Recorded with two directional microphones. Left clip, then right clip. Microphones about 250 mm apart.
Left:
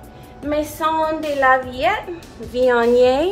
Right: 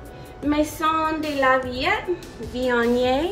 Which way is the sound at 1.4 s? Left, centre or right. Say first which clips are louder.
Left 4 dB; centre.